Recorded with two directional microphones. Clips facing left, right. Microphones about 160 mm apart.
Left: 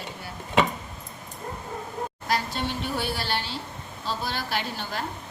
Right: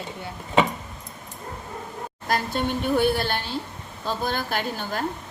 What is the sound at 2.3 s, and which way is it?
A woman's voice, 50° right (ahead or behind).